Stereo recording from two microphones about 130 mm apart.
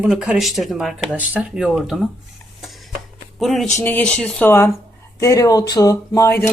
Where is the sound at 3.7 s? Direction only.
15° left (ahead or behind).